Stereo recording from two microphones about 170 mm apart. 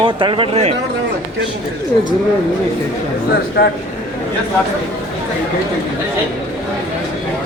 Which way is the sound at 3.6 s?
60° left (ahead or behind).